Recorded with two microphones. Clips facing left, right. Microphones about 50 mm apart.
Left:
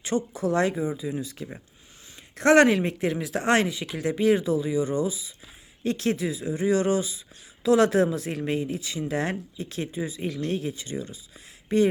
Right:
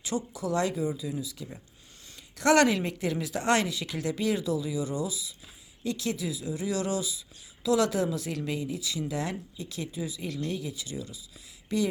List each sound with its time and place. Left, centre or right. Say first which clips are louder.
0.0 s speech: left 6 dB; left
1.1 s speech: left 4 dB; left